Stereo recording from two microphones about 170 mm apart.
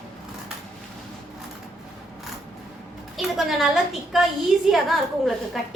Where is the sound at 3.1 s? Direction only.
Centre (ahead or behind).